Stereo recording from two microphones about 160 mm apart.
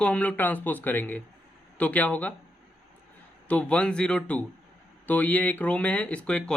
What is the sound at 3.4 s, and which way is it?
Speech, 5° left (ahead or behind).